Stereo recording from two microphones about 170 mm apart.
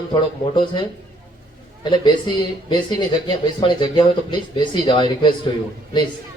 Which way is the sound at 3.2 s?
30° left (ahead or behind).